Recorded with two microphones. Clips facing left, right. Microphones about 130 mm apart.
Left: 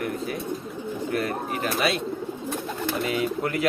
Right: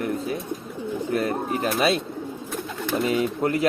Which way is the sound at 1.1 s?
30° right (ahead or behind).